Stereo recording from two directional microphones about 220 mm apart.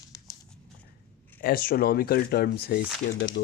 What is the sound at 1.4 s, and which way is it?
Speech, 45° left (ahead or behind).